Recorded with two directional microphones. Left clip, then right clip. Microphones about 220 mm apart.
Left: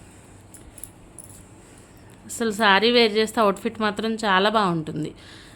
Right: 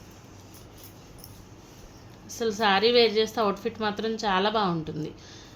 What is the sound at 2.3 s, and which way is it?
A woman's voice, 35° left (ahead or behind).